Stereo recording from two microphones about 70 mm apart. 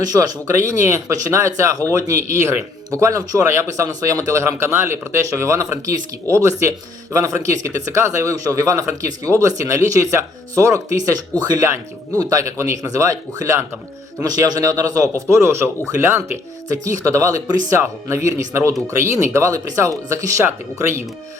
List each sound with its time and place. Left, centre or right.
0.0 s speech: right
1.0 s speech: right
11.3 s speech: right
12.1 s speech: right
14.2 s speech: right
15.3 s speech: right
16.6 s speech: right
17.7 s speech: right